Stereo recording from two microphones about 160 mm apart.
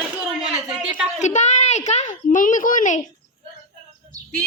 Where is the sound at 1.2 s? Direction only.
45° left (ahead or behind).